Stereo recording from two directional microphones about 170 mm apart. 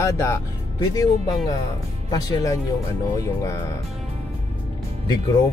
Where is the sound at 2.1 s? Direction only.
20° left (ahead or behind).